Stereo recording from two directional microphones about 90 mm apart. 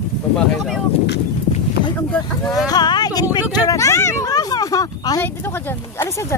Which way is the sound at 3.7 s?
35° left (ahead or behind).